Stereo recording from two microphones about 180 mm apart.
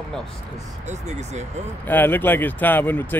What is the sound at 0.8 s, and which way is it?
Speech, 40° right (ahead or behind).